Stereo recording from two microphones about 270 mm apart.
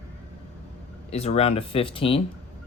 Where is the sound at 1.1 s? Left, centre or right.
Left.